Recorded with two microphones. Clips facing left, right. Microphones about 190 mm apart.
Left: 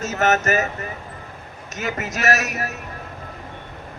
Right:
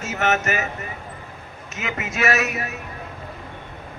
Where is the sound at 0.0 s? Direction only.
40° left (ahead or behind).